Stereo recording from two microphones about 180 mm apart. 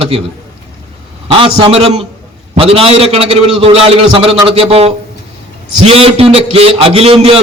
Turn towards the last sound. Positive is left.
turn(degrees=-35)  # may be behind; listen again after turning